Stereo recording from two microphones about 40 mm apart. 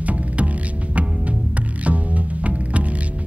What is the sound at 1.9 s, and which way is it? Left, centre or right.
Music, right.